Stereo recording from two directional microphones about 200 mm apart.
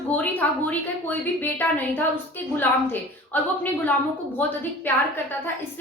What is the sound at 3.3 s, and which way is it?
A woman's voice, 10° left (ahead or behind).